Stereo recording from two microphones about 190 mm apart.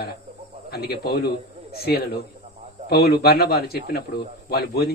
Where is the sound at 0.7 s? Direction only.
55° left (ahead or behind).